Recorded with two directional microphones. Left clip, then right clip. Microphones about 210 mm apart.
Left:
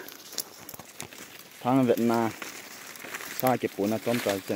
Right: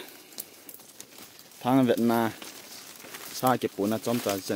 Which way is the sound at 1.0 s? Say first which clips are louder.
Left 8 dB; 50° left (ahead or behind).